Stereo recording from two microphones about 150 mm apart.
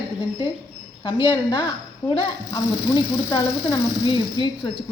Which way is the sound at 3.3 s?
30° left (ahead or behind).